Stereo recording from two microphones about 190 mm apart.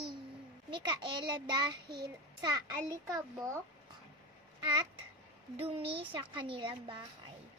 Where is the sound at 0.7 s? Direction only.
25° right (ahead or behind).